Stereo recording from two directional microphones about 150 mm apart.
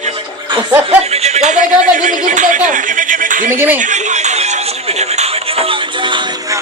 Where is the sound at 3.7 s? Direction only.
55° right (ahead or behind); by 6.6 s 30° right (ahead or behind).